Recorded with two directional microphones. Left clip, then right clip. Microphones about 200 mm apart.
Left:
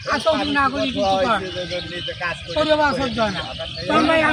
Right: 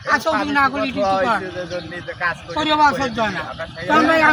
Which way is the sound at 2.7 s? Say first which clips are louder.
Right 4 dB; 25° left (ahead or behind).